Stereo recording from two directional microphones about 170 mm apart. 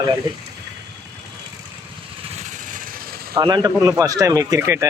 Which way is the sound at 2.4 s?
50° right (ahead or behind).